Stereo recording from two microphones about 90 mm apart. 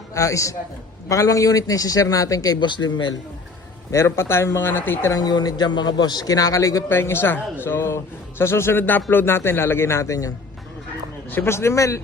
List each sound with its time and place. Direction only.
0.1 s a man's voice: 35° left (ahead or behind); by 3.2 s 55° left (ahead or behind)
3.9 s a man's voice: 30° left (ahead or behind)
5.1 s a man's voice: 50° left (ahead or behind)
11.3 s a man's voice: 25° left (ahead or behind)